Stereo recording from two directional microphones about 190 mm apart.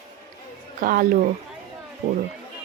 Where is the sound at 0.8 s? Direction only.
50° right (ahead or behind).